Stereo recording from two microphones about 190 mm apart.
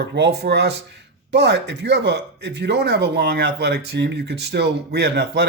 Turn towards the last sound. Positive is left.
turn(degrees=-60)  # may be behind; listen again after turning